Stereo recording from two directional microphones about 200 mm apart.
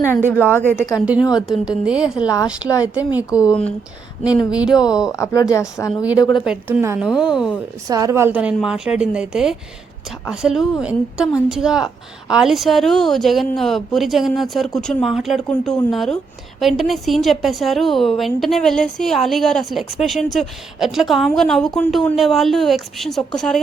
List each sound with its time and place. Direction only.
0.3 s speech: 10° left (ahead or behind)
1.4 s a woman's voice: 5° right (ahead or behind)
3.2 s speech: 15° left (ahead or behind)
4.4 s a woman's voice: 5° right (ahead or behind)
5.1 s a woman's voice: 15° left (ahead or behind)
6.4 s a woman's voice: 5° right (ahead or behind)
7.9 s a woman's voice: 15° right (ahead or behind); by 23.2 s centre (ahead or behind)